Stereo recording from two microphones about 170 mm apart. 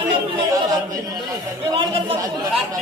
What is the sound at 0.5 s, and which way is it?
Chatter, 20° right (ahead or behind).